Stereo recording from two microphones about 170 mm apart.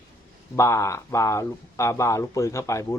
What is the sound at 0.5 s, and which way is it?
Speech, 15° left (ahead or behind).